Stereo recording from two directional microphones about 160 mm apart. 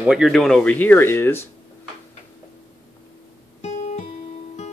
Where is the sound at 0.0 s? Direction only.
5° right (ahead or behind); by 1.5 s 15° left (ahead or behind).